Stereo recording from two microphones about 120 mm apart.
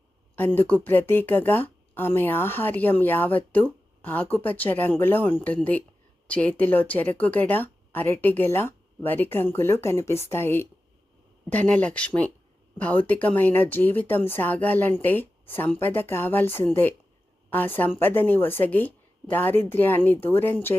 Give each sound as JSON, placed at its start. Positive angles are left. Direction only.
{"t": 0.3, "sound": "speech", "side_deg": 15}